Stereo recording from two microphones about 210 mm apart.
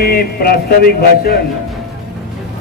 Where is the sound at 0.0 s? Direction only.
45° left (ahead or behind).